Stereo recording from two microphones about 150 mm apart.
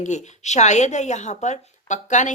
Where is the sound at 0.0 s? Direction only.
55° left (ahead or behind).